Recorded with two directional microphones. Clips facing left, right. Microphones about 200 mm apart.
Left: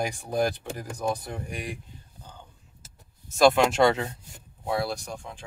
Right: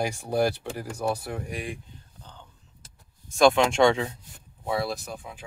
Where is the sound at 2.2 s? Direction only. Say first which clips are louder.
Left 2 dB; 5° left (ahead or behind).